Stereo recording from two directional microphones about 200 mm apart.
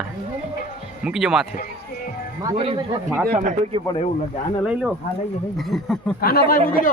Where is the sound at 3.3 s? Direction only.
40° right (ahead or behind).